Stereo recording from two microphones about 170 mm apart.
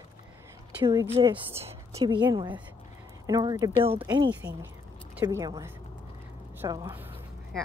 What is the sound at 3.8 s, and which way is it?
A woman's voice, 30° right (ahead or behind).